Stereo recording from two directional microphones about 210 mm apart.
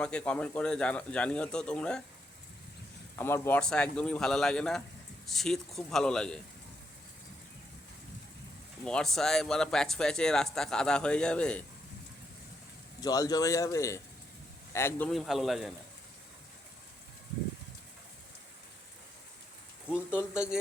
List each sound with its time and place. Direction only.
0.0 s speech: 5° left (ahead or behind)
3.2 s speech: 10° left (ahead or behind)
8.8 s speech: 5° left (ahead or behind)
13.0 s a man's voice: 20° left (ahead or behind); by 15.7 s centre (ahead or behind)
20.1 s speech: 5° right (ahead or behind)